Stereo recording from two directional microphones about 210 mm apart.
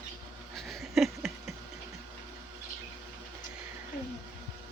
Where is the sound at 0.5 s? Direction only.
Centre (ahead or behind).